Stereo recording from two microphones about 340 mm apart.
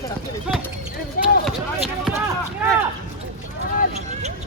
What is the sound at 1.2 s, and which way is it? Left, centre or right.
Basketball bounce, left.